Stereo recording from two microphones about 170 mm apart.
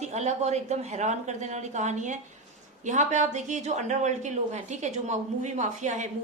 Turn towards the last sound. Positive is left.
turn(degrees=-45)  # may be behind; listen again after turning